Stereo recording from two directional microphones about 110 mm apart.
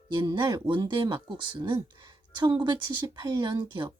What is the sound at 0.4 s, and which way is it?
Speech, 35° right (ahead or behind).